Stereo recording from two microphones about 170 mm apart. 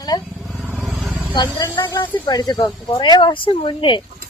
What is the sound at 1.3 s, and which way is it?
A woman's voice, 25° left (ahead or behind).